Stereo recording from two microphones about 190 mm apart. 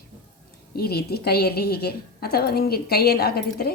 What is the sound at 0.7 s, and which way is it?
A woman's voice, 55° left (ahead or behind).